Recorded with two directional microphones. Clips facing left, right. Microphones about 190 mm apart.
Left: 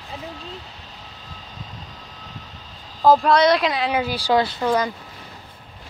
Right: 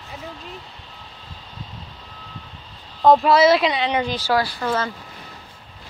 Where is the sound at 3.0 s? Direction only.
Centre (ahead or behind); by 4.9 s 15° left (ahead or behind).